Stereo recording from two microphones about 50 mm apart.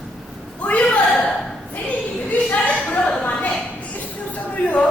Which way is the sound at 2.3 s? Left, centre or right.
Left.